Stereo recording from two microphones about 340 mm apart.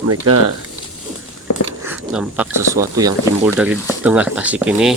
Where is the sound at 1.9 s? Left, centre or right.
Centre.